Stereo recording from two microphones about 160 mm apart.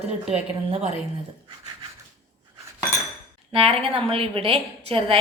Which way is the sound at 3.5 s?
35° right (ahead or behind).